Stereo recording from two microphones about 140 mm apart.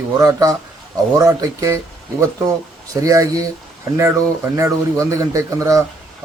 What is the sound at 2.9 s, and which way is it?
Speech, 25° right (ahead or behind).